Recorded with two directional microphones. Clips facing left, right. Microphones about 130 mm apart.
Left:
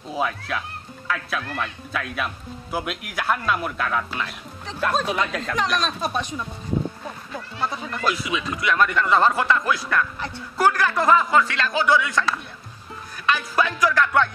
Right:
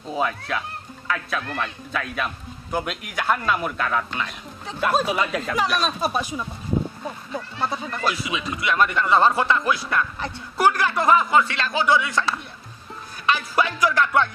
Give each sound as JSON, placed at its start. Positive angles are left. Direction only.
{"t": 0.1, "sound": "speech", "side_deg": 0}
{"t": 7.3, "sound": "speech", "side_deg": -30}
{"t": 13.3, "sound": "music", "side_deg": -25}